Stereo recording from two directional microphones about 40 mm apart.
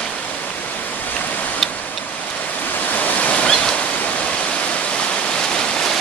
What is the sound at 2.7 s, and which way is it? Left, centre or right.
Waves, left.